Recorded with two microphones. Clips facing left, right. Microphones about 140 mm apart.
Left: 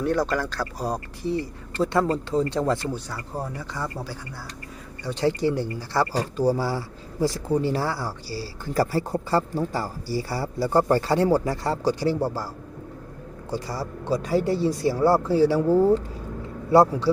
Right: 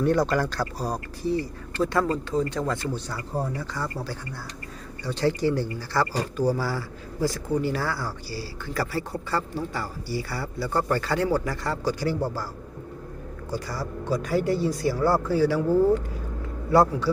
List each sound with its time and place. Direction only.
0.0 s speech: centre (ahead or behind)
1.2 s speech: 20° left (ahead or behind)
2.9 s speech: 10° left (ahead or behind)
5.0 s speech: 20° left (ahead or behind)
13.5 s speech: 30° left (ahead or behind)